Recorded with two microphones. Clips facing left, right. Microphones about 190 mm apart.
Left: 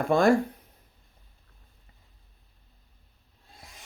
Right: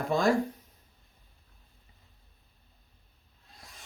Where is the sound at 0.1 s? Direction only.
55° left (ahead or behind).